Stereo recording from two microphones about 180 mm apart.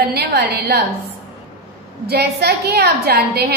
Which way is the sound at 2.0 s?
65° right (ahead or behind).